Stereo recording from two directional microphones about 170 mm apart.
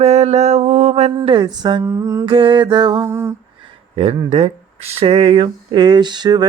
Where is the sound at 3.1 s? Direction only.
15° right (ahead or behind).